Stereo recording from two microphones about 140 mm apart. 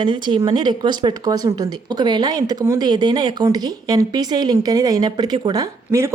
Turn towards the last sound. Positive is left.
turn(degrees=-20)  # may be behind; listen again after turning